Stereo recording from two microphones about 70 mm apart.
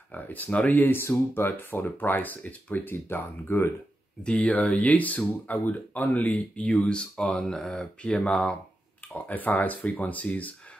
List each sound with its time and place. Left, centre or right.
0.1 s speech: left
4.2 s speech: centre